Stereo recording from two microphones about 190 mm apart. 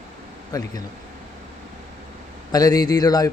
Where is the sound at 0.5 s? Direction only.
20° left (ahead or behind).